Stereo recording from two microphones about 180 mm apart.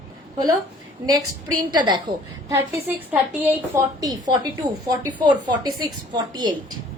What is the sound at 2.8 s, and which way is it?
A woman's voice, 10° right (ahead or behind).